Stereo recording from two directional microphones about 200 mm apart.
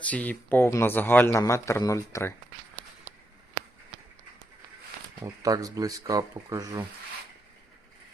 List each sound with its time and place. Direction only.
0.0 s a man's voice: 5° left (ahead or behind)
5.2 s speech: 15° right (ahead or behind)